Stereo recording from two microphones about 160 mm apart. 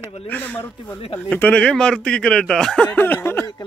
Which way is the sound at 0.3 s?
10° left (ahead or behind).